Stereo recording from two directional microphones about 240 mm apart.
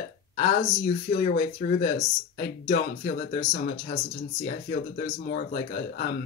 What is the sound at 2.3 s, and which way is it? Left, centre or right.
Speech, left.